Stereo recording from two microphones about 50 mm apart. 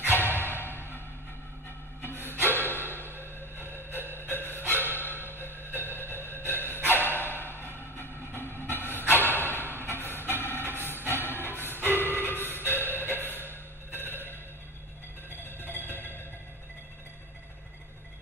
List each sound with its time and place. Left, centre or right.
0.1 s music: left
3.6 s a sound: left
4.4 s music: left
4.9 s dog: left
5.4 s music: left
6.5 s bow-wow: left
7.0 s dog: left
7.3 s music: left
8.0 s vehicle: left
9.1 s a sound: left
9.8 s music: left